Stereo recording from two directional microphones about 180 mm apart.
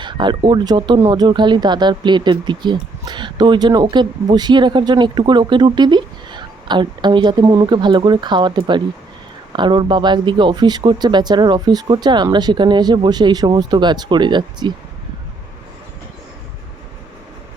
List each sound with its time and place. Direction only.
0.0 s speech: 25° right (ahead or behind)